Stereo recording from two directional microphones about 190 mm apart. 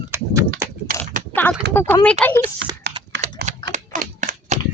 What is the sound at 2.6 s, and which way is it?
Typing, 70° right (ahead or behind).